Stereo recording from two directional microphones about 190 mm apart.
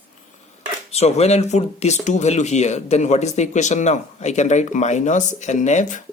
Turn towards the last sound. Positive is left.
turn(degrees=40)  # may be behind; listen again after turning